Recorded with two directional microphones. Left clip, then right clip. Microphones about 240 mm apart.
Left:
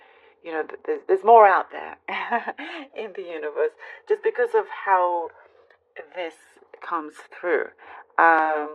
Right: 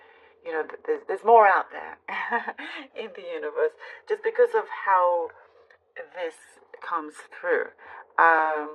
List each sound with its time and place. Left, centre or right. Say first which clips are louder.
0.4 s a woman's voice: left 1 dB; left